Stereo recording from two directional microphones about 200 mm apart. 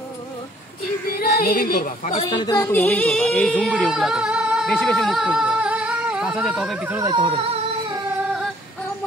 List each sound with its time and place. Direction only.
1.1 s speech: 50° left (ahead or behind)
2.1 s speech: 25° left (ahead or behind)
2.8 s speech: 5° left (ahead or behind)
7.1 s music: 25° right (ahead or behind)